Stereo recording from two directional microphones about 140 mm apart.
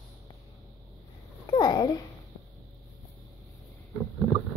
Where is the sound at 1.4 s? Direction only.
30° left (ahead or behind).